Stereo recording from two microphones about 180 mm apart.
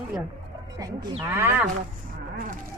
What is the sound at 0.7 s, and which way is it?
Speech, 20° right (ahead or behind).